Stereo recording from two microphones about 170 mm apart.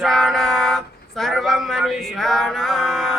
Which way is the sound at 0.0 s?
Centre (ahead or behind).